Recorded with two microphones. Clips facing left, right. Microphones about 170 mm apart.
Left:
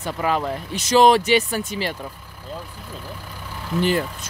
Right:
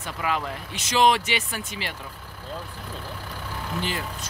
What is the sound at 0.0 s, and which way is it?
Speech, 40° left (ahead or behind).